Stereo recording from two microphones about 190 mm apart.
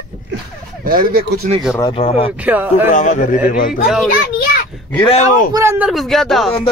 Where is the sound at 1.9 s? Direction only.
30° left (ahead or behind).